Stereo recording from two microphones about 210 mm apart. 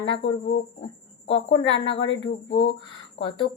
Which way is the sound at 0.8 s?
25° left (ahead or behind).